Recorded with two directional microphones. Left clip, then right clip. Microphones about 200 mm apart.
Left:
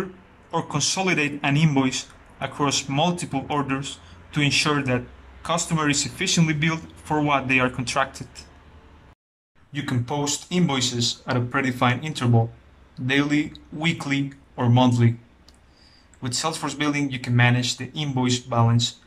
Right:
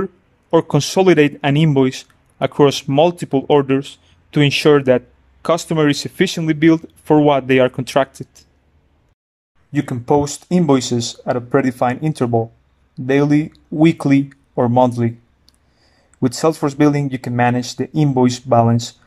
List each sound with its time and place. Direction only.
0.5 s a man's voice: 40° right (ahead or behind)
9.7 s a man's voice: 35° right (ahead or behind)
16.2 s a man's voice: 40° right (ahead or behind)